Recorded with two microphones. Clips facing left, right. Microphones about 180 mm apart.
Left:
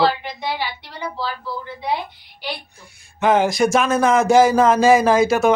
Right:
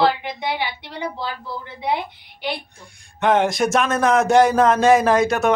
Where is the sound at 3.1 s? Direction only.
Centre (ahead or behind).